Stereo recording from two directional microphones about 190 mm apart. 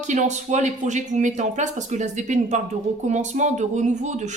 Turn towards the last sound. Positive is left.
turn(degrees=-40)  # may be behind; listen again after turning